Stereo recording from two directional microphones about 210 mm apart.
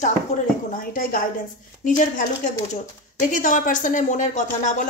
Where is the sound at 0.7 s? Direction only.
40° left (ahead or behind).